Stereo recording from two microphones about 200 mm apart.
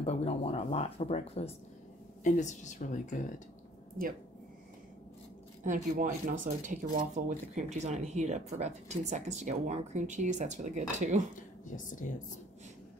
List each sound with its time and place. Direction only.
0.0 s speech: 30° left (ahead or behind)
5.6 s speech: 40° right (ahead or behind)
11.3 s speech: 40° left (ahead or behind)